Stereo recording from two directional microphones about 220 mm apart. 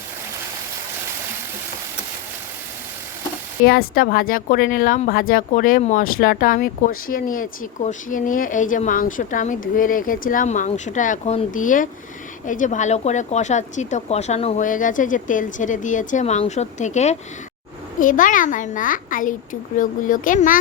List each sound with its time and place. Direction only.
3.7 s speech: 40° left (ahead or behind)